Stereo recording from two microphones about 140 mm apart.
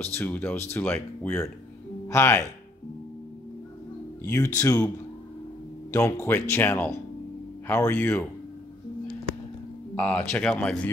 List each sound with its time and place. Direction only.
0.0 s speech: 15° left (ahead or behind)
4.3 s speech: 10° left (ahead or behind)
9.9 s speech: 10° left (ahead or behind)